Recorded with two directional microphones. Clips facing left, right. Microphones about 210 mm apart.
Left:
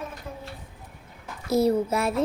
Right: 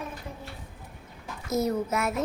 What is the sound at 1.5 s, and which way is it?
Speech, 30° left (ahead or behind).